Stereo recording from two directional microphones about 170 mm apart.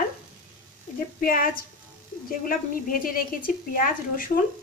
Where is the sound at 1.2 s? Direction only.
55° left (ahead or behind).